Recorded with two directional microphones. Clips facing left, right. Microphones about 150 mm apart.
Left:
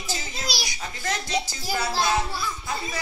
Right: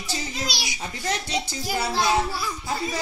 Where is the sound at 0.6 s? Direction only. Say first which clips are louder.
Right 2 dB; 25° right (ahead or behind).